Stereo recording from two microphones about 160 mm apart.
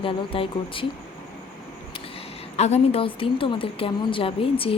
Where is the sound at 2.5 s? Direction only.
40° left (ahead or behind).